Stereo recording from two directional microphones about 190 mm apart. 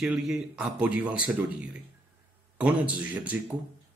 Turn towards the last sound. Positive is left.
turn(degrees=-5)  # may be behind; listen again after turning